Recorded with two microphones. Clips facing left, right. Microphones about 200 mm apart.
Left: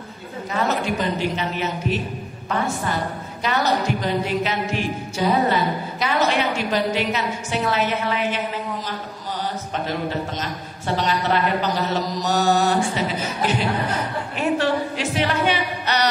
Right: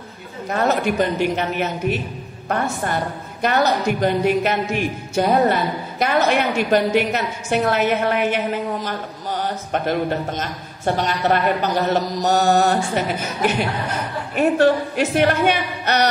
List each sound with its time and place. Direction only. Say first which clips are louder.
0.5 s a woman's voice: right 4 dB; 55° right (ahead or behind)
4.0 s a woman's voice: right 5 dB; 55° right (ahead or behind)
9.7 s a woman's voice: right 7 dB; 55° right (ahead or behind)
11.0 s mantra: right 1 dB; 50° right (ahead or behind)